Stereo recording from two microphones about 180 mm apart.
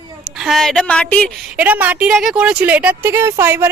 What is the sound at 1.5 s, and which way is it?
Speech, 10° right (ahead or behind).